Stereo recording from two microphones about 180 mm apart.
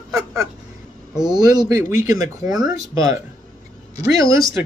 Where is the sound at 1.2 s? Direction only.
25° right (ahead or behind).